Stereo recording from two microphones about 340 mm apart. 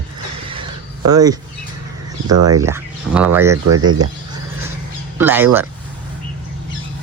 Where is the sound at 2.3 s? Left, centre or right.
Right.